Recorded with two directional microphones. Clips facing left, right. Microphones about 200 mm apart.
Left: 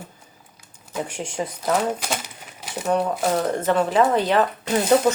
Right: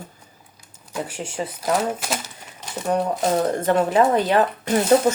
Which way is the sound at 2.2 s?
10° left (ahead or behind).